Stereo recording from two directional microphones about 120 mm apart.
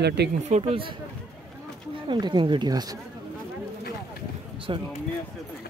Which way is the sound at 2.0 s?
40° right (ahead or behind).